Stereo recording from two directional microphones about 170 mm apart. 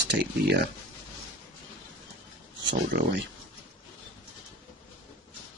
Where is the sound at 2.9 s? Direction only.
70° right (ahead or behind).